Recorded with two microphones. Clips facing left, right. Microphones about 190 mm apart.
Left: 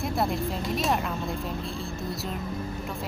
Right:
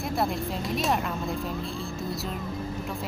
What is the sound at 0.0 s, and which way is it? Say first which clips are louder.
Speech: left 1 dB; centre (ahead or behind).